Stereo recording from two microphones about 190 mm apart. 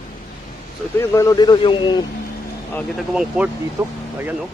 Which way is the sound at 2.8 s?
Centre (ahead or behind).